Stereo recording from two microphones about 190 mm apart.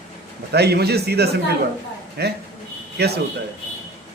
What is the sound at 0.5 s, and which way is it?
A man's voice, 60° right (ahead or behind).